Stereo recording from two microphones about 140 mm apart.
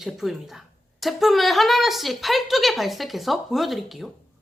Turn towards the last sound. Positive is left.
turn(degrees=0)  # may be behind; listen again after turning